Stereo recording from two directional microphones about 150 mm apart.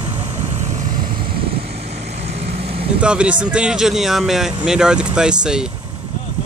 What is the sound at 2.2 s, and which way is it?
Vehicle, 45° right (ahead or behind).